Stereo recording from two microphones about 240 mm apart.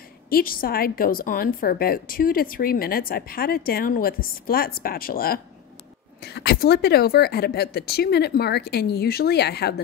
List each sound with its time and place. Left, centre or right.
0.3 s a woman's voice: left